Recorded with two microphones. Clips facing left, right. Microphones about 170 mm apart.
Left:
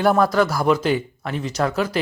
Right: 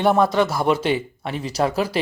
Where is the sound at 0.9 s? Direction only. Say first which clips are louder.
Left 1 dB; 30° right (ahead or behind).